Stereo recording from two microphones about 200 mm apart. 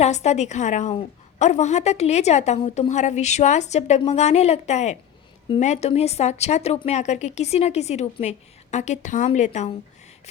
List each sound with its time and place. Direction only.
0.0 s a woman's voice: 35° left (ahead or behind)